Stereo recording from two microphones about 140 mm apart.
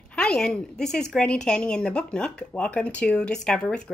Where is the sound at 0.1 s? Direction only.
10° left (ahead or behind).